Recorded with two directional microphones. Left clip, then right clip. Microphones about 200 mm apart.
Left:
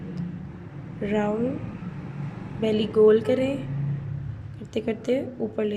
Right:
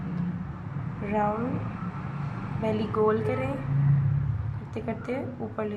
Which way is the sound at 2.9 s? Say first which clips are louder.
Left 8 dB; 35° left (ahead or behind).